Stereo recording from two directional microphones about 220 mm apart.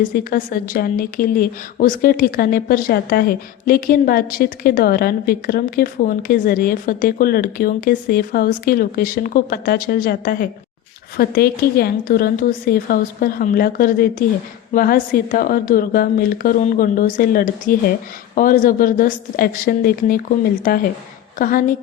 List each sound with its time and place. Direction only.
0.1 s a woman's voice: 40° left (ahead or behind)
21.3 s a woman's voice: 40° left (ahead or behind)